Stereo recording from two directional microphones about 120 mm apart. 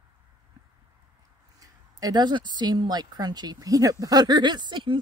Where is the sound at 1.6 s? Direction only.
30° right (ahead or behind).